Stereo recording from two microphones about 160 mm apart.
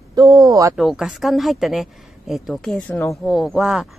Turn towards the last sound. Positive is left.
turn(degrees=0)  # may be behind; listen again after turning